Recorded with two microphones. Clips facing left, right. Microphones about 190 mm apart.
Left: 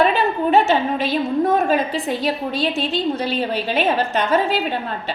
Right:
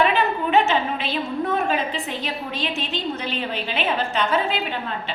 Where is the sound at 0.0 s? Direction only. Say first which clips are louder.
Left 3 dB; 35° left (ahead or behind).